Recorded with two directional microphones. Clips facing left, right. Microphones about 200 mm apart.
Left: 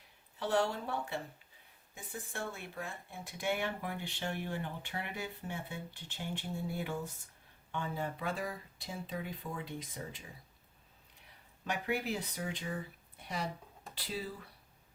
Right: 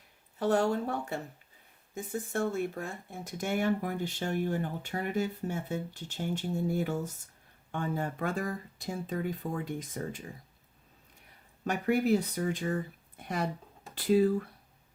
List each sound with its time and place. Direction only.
0.3 s speech: 45° right (ahead or behind)
11.6 s speech: 45° right (ahead or behind)